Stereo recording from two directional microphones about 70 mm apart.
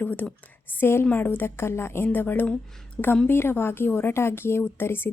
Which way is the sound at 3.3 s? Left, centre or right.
Left.